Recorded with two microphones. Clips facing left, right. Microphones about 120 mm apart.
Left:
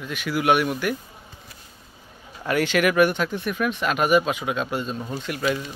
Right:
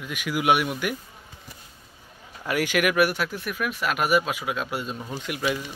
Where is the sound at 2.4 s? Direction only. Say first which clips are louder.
Left 3 dB; 10° right (ahead or behind).